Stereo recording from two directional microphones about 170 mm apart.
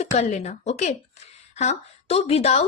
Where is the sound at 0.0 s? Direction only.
45° left (ahead or behind).